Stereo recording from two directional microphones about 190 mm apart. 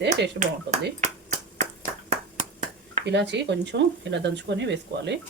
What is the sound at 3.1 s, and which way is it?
Speech, 65° right (ahead or behind).